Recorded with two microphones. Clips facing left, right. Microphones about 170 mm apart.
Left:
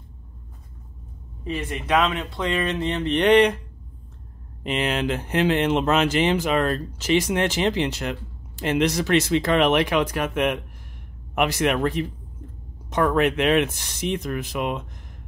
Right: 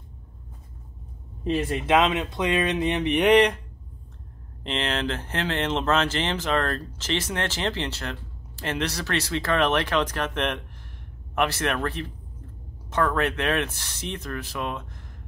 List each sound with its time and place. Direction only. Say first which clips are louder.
1.9 s speech: even; 25° right (ahead or behind); by 3.6 s centre (ahead or behind)
4.6 s speech: left 4 dB; 10° left (ahead or behind)